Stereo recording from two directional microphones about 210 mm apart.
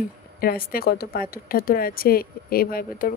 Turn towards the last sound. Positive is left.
turn(degrees=45)  # may be behind; listen again after turning